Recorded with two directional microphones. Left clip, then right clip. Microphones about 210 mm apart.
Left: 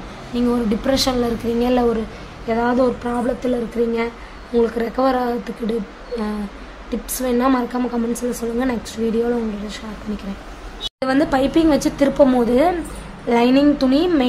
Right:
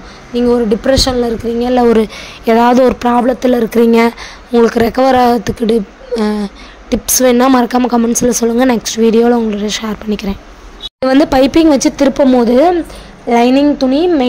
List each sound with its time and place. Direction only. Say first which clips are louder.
0.3 s speech: right 9 dB; 30° right (ahead or behind)
2.4 s speech: right 10 dB; 55° right (ahead or behind)
4.6 s speech: right 9 dB; 45° right (ahead or behind); by 14.2 s 25° right (ahead or behind)